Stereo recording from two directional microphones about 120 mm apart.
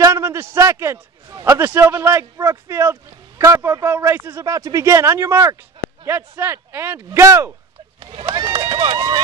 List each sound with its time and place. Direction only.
0.0 s a sound: 20° right (ahead or behind)
1.4 s a man's voice: 20° right (ahead or behind)
8.0 s speech: 45° right (ahead or behind)